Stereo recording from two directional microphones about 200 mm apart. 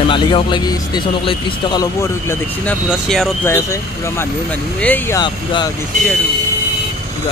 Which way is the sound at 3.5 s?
15° left (ahead or behind).